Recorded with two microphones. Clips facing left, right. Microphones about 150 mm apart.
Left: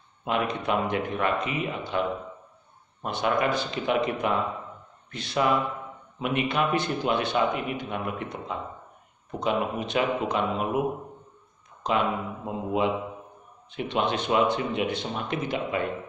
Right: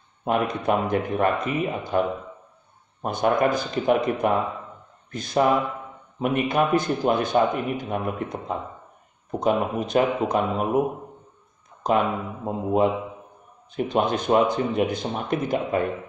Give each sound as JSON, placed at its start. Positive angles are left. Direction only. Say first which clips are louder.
{"t": 0.2, "sound": "speech", "louder": "right 4 dB", "side_deg": -45}
{"t": 11.8, "sound": "speech", "louder": "right 4 dB", "side_deg": -45}